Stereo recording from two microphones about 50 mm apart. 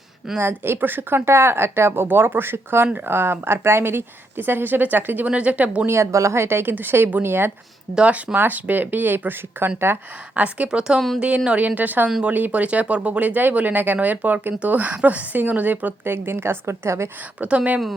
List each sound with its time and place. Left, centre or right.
0.3 s speech: right
5.2 s a woman's voice: right
5.8 s speech: right
7.9 s a woman's voice: right
10.3 s a woman's voice: right
10.7 s a woman's voice: centre; by 16.0 s right
16.0 s a woman's voice: right
17.4 s a woman's voice: right